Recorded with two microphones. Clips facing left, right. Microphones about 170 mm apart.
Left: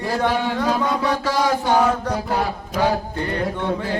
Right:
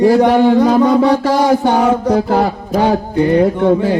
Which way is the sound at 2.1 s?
55° right (ahead or behind).